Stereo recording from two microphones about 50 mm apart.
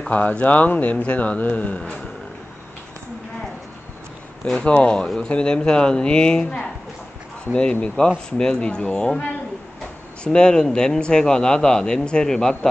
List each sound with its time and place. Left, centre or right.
0.1 s speech: left
4.6 s speech: left
7.8 s speech: centre
10.2 s speech: centre